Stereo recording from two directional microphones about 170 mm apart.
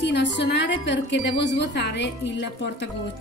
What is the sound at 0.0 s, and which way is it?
A woman's voice, 90° left.